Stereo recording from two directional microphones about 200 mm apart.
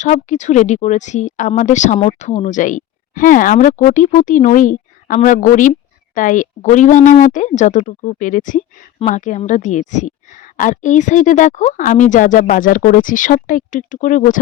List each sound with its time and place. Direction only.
0.0 s speech: 35° left (ahead or behind)